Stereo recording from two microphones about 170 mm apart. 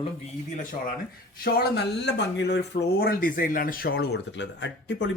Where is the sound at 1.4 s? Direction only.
70° left (ahead or behind); by 5.1 s 90° left.